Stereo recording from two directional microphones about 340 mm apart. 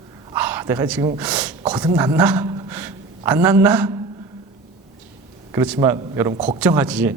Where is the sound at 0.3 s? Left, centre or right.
Centre.